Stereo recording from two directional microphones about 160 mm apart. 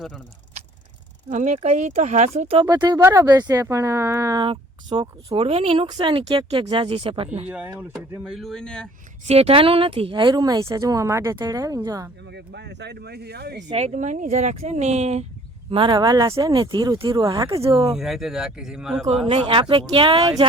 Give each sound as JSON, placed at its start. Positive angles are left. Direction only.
{"t": 1.3, "sound": "speech", "side_deg": -50}
{"t": 7.4, "sound": "speech", "side_deg": -10}
{"t": 9.2, "sound": "speech", "side_deg": -40}
{"t": 12.3, "sound": "speech", "side_deg": -90}
{"t": 13.7, "sound": "speech", "side_deg": -40}
{"t": 15.7, "sound": "speech", "side_deg": -30}
{"t": 17.9, "sound": "speech", "side_deg": 0}
{"t": 19.3, "sound": "speech", "side_deg": -35}